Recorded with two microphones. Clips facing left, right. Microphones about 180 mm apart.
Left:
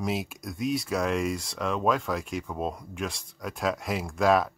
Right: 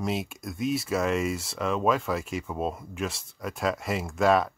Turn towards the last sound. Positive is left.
turn(degrees=0)  # may be behind; listen again after turning